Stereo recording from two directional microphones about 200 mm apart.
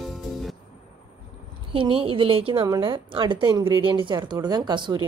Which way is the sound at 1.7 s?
25° right (ahead or behind).